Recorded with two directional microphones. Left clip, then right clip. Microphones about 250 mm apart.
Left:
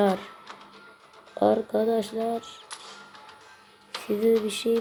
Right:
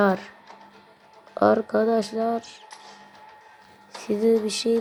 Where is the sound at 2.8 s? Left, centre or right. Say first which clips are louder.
Left 1 dB; left.